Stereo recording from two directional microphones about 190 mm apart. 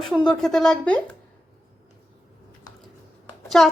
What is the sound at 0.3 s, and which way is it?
Speech, centre (ahead or behind).